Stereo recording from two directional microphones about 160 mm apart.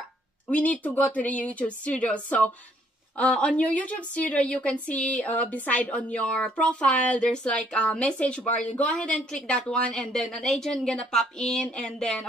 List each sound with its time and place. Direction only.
0.5 s a woman's voice: 10° left (ahead or behind)